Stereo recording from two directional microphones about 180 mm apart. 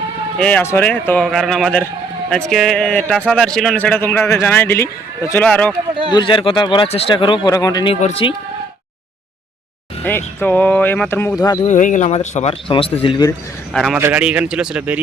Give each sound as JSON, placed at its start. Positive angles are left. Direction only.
{"t": 0.3, "sound": "a man's voice", "side_deg": 10}
{"t": 6.1, "sound": "speech", "side_deg": 25}
{"t": 10.0, "sound": "a man's voice", "side_deg": 10}
{"t": 11.6, "sound": "speech", "side_deg": 45}
{"t": 13.7, "sound": "a man's voice", "side_deg": 0}